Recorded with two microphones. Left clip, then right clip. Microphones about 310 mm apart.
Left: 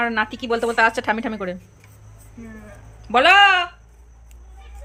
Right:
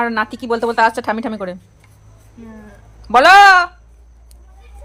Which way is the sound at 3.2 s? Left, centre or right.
Centre.